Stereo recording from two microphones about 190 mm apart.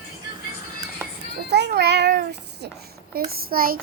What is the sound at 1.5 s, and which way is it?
A child's voice, 60° right (ahead or behind).